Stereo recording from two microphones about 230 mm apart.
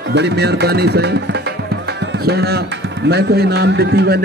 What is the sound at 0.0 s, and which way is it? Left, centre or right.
Speech, right.